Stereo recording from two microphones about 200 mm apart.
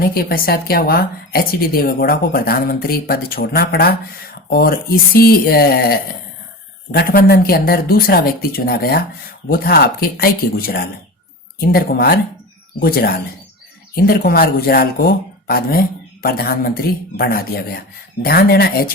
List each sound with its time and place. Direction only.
0.0 s speech: 50° left (ahead or behind)